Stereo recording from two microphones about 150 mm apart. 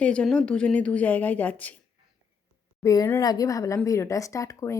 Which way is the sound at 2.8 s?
20° left (ahead or behind).